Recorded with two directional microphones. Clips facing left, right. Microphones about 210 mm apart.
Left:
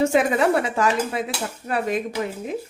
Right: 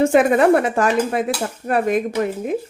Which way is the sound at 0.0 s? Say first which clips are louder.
Right 5 dB; 55° right (ahead or behind).